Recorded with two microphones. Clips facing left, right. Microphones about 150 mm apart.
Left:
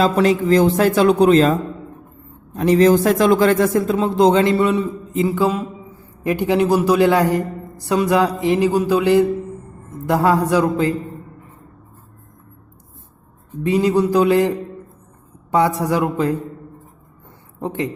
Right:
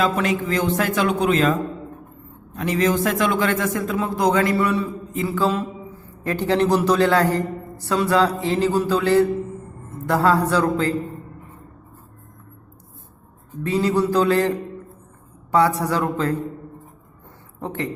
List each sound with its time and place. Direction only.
0.0 s a man's voice: 35° left (ahead or behind); by 10.9 s 15° left (ahead or behind)
13.7 s a man's voice: 15° left (ahead or behind)
15.5 s a man's voice: 15° left (ahead or behind)
17.6 s a man's voice: 15° left (ahead or behind)